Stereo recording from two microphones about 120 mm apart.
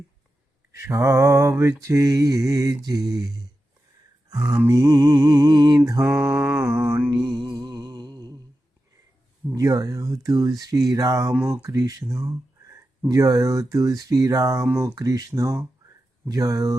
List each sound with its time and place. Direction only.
0.7 s speech: 25° right (ahead or behind)
4.7 s music: 35° right (ahead or behind)
6.1 s mantra: 15° right (ahead or behind)
7.1 s music: 35° right (ahead or behind)
9.6 s speech: 30° right (ahead or behind)
14.7 s mantra: 15° right (ahead or behind)
14.9 s speech: 30° right (ahead or behind)